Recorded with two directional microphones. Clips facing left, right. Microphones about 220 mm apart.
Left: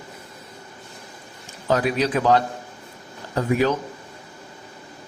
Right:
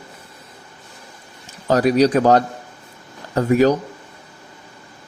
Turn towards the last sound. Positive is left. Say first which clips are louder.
# right 6 dB
turn(degrees=-40)  # may be behind; listen again after turning